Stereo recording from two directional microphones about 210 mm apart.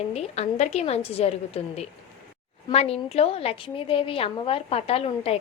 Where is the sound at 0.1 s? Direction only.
30° left (ahead or behind).